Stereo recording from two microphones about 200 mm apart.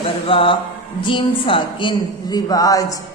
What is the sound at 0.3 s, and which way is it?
A man's voice, 25° left (ahead or behind).